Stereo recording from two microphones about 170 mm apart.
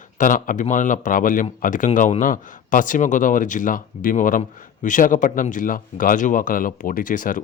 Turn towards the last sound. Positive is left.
turn(degrees=50)  # may be behind; listen again after turning